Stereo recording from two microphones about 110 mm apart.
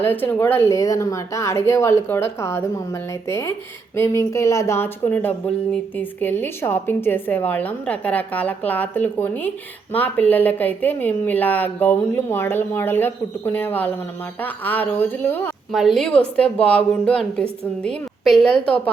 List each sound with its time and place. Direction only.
0.0 s a woman's voice: 20° left (ahead or behind)
15.7 s a woman's voice: centre (ahead or behind)